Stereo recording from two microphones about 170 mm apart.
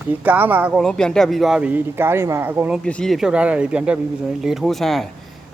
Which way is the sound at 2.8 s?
5° left (ahead or behind).